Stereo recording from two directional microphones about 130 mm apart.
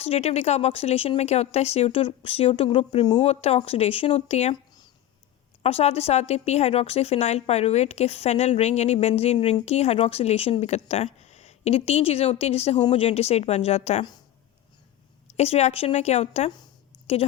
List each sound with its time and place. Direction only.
0.0 s speech: 55° left (ahead or behind)
3.2 s speech: 55° left (ahead or behind)
5.6 s a woman's voice: 55° left (ahead or behind)
15.3 s a woman's voice: 55° left (ahead or behind)